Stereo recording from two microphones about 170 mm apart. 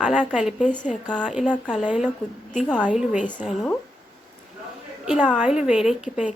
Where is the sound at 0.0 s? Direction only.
5° right (ahead or behind).